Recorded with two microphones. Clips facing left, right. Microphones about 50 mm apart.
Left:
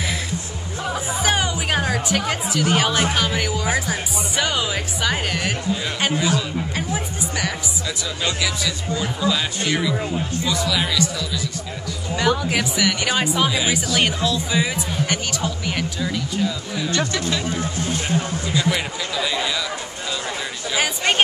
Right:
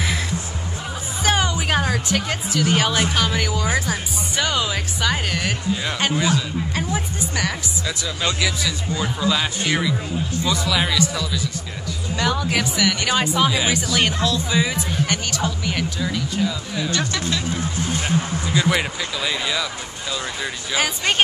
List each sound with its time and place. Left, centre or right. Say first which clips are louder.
0.9 s speech: right 1 dB; centre
7.8 s speech: right 1 dB; centre
12.2 s speech: left 1 dB; centre
13.5 s speech: even; centre
16.9 s speech: left 2 dB; left
18.6 s speech: right 3 dB; centre
20.7 s speech: left 1 dB; centre